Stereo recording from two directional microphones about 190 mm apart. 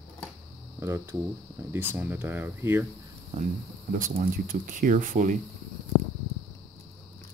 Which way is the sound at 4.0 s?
45° right (ahead or behind).